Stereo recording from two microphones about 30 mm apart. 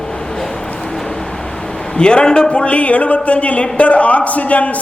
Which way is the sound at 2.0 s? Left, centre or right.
Left.